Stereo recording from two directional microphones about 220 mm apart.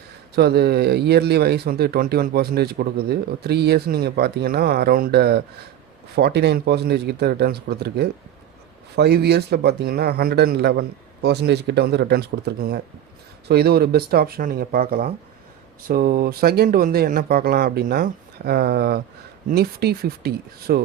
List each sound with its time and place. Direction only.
0.3 s speech: 45° right (ahead or behind)